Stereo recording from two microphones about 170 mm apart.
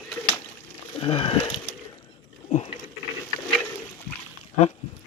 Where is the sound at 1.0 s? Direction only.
35° left (ahead or behind).